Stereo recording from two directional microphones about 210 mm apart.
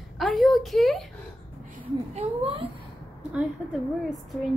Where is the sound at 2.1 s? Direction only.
30° right (ahead or behind).